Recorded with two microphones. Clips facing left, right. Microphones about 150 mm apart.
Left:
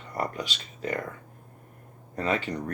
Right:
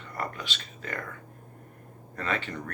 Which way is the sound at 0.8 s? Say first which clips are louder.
Left 7 dB; 20° left (ahead or behind).